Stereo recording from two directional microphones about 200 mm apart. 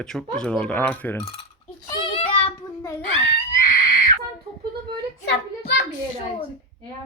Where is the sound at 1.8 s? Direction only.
25° left (ahead or behind).